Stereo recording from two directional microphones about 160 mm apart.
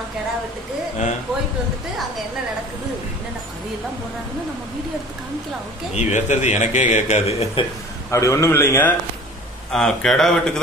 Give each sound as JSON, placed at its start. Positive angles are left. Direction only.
{"t": 5.9, "sound": "a man's voice", "side_deg": 45}
{"t": 8.1, "sound": "a man's voice", "side_deg": 20}
{"t": 9.7, "sound": "speech", "side_deg": 5}